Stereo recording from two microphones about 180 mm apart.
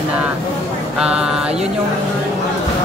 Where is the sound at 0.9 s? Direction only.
5° right (ahead or behind).